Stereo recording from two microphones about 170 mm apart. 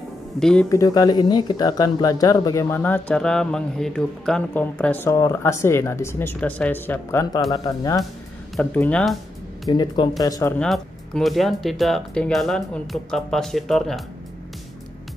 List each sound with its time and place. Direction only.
0.4 s speech: 5° left (ahead or behind)
0.7 s speech: 20° left (ahead or behind)
8.5 s speech: 10° left (ahead or behind)
9.7 s speech: 25° left (ahead or behind)
10.6 s speech: centre (ahead or behind)